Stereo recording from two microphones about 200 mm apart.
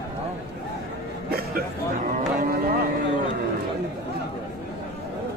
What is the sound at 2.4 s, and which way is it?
Cattle, 50° right (ahead or behind).